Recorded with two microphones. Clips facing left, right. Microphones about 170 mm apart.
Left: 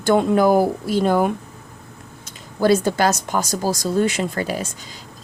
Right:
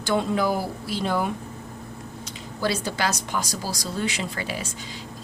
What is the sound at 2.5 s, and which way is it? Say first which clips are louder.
Speech: left 10 dB; 50° left (ahead or behind).